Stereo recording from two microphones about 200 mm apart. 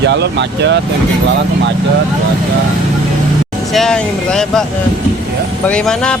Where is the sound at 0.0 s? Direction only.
60° right (ahead or behind).